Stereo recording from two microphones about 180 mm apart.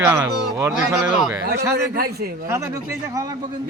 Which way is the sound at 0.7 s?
5° right (ahead or behind).